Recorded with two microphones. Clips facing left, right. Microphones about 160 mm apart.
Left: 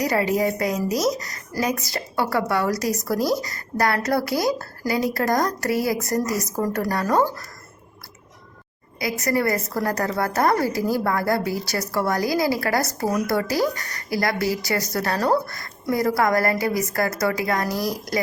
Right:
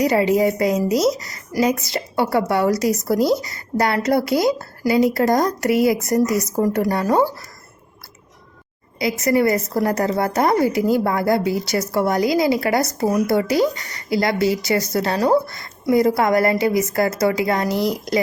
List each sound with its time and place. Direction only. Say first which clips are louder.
0.0 s speech: right 5 dB; 25° right (ahead or behind)
7.1 s speech: right 2 dB; 10° right (ahead or behind)
9.0 s speech: right 5 dB; 25° right (ahead or behind)